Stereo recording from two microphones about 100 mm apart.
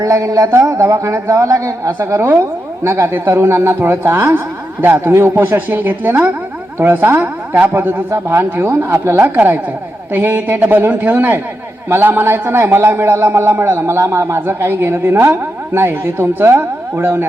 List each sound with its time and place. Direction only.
0.0 s a man's voice: 30° right (ahead or behind)